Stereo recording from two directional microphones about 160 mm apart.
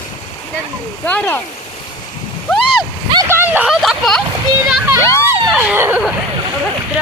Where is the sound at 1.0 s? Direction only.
10° left (ahead or behind).